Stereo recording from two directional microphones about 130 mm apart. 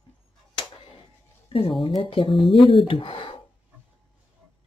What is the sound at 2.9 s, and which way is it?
Speech, 40° left (ahead or behind).